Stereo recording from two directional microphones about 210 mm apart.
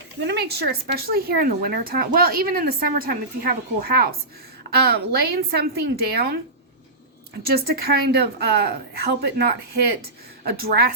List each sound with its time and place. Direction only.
0.2 s a woman's voice: 50° right (ahead or behind)
7.4 s a woman's voice: 45° right (ahead or behind)